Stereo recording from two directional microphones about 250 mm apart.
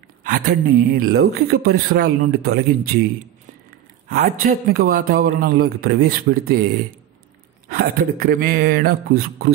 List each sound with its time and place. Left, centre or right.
0.2 s a man's voice: right
4.1 s a man's voice: right
7.6 s a man's voice: right